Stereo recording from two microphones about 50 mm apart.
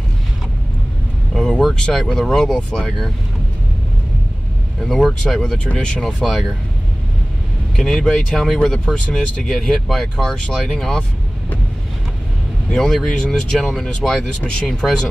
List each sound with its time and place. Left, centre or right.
1.3 s vehicle: centre
2.0 s speech: centre
4.7 s speech: centre
5.3 s speech: centre
6.1 s speech: centre
7.7 s speech: centre
12.7 s speech: centre